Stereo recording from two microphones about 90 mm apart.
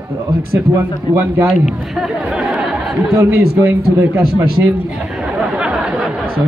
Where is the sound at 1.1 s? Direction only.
55° left (ahead or behind).